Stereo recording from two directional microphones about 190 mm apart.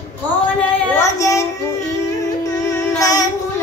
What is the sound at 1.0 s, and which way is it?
Child singing, 15° left (ahead or behind).